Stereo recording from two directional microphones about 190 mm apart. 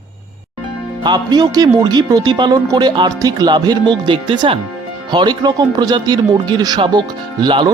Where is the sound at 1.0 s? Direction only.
20° right (ahead or behind).